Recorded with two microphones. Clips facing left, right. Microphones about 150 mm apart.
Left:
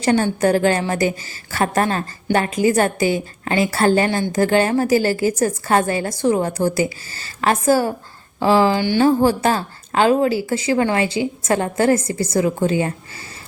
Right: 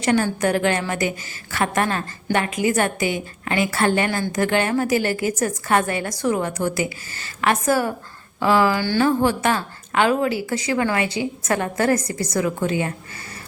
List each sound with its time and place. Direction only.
0.0 s a woman's voice: 30° left (ahead or behind)
9.0 s a woman's voice: 35° left (ahead or behind)